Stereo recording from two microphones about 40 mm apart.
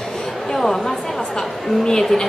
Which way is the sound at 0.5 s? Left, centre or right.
Centre.